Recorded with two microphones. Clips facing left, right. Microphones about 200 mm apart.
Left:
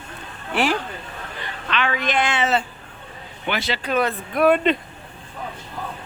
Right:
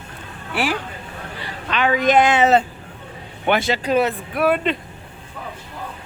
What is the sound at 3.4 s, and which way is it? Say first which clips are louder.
Speech: right 6 dB; 50° right (ahead or behind).